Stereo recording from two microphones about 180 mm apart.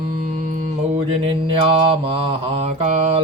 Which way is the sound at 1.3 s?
30° right (ahead or behind).